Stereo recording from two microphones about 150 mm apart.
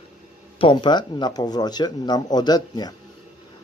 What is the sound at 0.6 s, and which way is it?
Speech, 30° left (ahead or behind).